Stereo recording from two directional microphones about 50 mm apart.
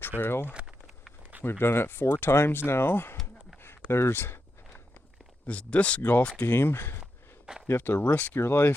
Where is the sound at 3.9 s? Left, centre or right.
Left.